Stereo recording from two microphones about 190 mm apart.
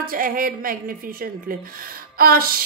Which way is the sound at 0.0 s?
50° right (ahead or behind).